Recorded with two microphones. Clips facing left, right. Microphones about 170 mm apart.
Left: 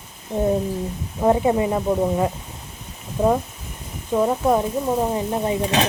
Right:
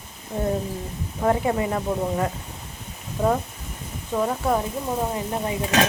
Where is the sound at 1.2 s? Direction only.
20° left (ahead or behind).